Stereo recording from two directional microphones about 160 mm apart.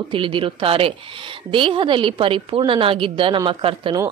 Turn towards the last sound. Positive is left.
turn(degrees=-35)  # may be behind; listen again after turning